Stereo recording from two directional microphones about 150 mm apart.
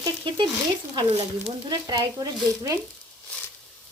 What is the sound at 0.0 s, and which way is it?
Frying, 30° right (ahead or behind).